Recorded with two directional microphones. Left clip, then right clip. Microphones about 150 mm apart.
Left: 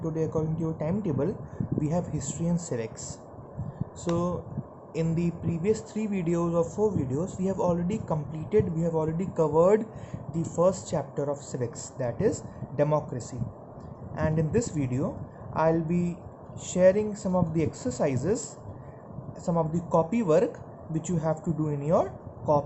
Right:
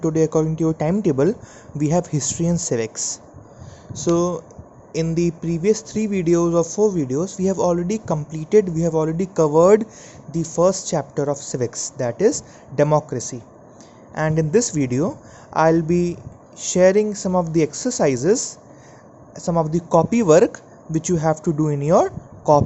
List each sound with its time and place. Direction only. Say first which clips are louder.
0.0 s speech: right 11 dB; 50° right (ahead or behind)
4.1 s speech: right 10 dB; 40° right (ahead or behind)